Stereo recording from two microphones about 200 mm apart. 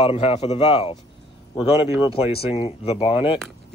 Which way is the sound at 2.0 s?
30° left (ahead or behind).